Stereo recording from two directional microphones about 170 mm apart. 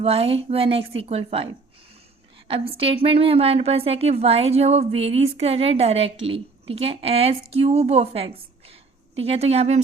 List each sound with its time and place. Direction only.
0.0 s a woman's voice: 35° right (ahead or behind)
2.5 s a woman's voice: 35° right (ahead or behind)